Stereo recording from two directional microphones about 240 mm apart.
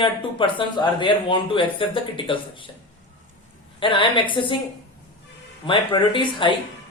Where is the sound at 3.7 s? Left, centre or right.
Left.